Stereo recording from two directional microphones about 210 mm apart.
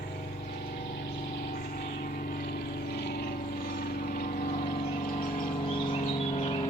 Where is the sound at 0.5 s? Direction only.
45° left (ahead or behind).